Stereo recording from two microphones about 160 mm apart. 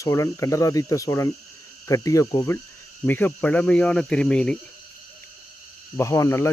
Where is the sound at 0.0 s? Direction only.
20° left (ahead or behind).